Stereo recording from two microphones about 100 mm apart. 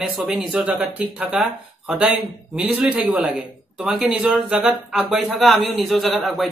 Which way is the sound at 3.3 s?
Centre (ahead or behind).